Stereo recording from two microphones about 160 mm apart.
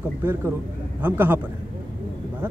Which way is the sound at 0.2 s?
15° right (ahead or behind).